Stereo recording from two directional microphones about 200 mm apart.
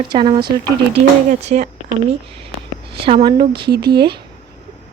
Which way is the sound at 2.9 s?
25° right (ahead or behind).